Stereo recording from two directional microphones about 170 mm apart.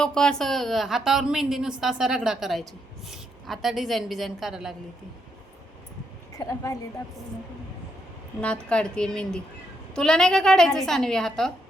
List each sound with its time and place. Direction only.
0.0 s a woman's voice: 5° left (ahead or behind)
6.3 s a woman's voice: 20° left (ahead or behind)
8.4 s a woman's voice: 5° left (ahead or behind)